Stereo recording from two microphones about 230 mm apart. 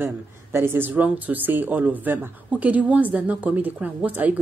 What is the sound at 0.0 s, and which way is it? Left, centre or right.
Speech, centre.